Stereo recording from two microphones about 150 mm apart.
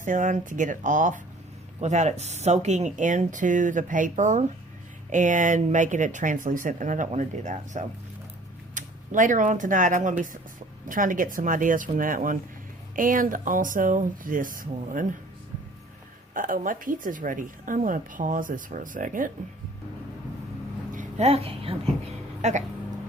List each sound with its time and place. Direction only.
0.0 s a woman's voice: 60° right (ahead or behind)
16.3 s a woman's voice: 65° right (ahead or behind)
20.9 s a sound: 60° right (ahead or behind)
21.2 s a woman's voice: 40° right (ahead or behind)